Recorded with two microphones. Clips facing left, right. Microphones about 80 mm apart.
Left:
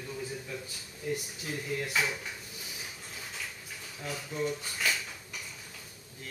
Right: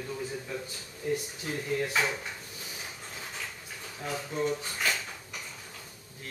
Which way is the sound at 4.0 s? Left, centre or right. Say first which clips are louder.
Right 3 dB; right.